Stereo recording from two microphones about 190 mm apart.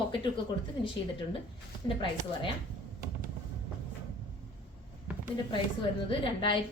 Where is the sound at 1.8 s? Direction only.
25° left (ahead or behind).